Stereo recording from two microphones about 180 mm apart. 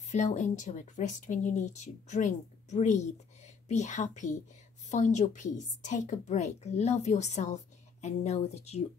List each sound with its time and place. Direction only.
0.1 s a woman's voice: 40° left (ahead or behind)